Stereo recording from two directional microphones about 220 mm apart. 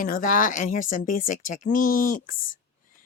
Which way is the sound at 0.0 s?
40° left (ahead or behind).